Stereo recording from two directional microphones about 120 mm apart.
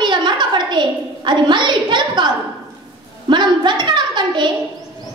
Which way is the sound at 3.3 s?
40° right (ahead or behind).